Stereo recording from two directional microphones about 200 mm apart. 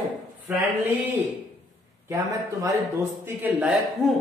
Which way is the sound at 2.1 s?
15° right (ahead or behind).